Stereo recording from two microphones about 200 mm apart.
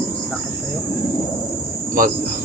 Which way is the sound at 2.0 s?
45° right (ahead or behind).